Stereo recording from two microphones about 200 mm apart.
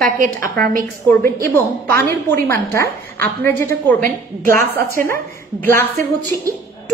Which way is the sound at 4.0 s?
45° right (ahead or behind).